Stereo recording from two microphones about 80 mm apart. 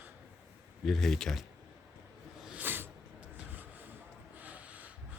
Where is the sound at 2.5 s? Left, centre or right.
Right.